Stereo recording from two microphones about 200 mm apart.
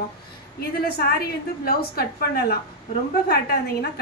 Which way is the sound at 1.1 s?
50° left (ahead or behind).